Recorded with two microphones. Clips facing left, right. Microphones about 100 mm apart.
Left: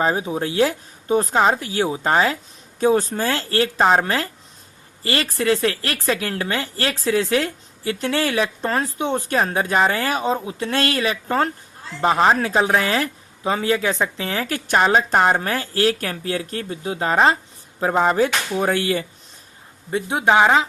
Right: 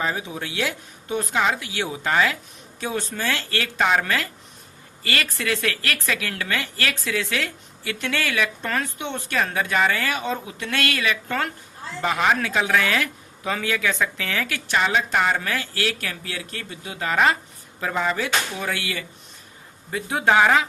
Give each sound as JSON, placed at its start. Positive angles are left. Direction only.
{"t": 0.0, "sound": "speech", "side_deg": 35}
{"t": 19.9, "sound": "speech", "side_deg": 25}